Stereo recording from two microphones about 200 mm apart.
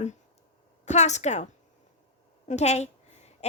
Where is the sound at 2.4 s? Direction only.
35° left (ahead or behind).